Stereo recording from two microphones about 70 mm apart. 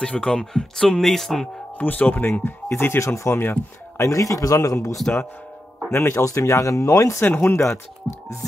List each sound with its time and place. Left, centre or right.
0.0 s speech: centre
1.8 s speech: left
4.0 s speech: left
5.9 s speech: left
7.3 s speech: left